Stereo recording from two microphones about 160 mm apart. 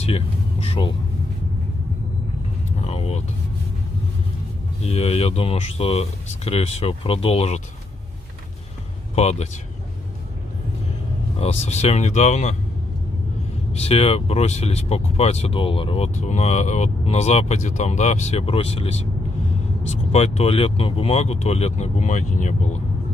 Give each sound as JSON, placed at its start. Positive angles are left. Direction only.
{"t": 0.0, "sound": "speech", "side_deg": 40}
{"t": 2.8, "sound": "vehicle", "side_deg": 40}
{"t": 4.8, "sound": "speech", "side_deg": 40}
{"t": 9.1, "sound": "speech", "side_deg": 45}
{"t": 11.3, "sound": "speech", "side_deg": 40}
{"t": 13.7, "sound": "speech", "side_deg": 40}
{"t": 20.1, "sound": "speech", "side_deg": 40}